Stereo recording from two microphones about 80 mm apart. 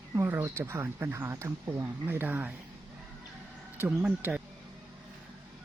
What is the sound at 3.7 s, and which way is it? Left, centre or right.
Speech, right.